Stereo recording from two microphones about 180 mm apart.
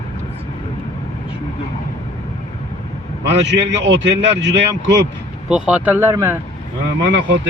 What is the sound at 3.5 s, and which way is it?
A man's voice, 80° right.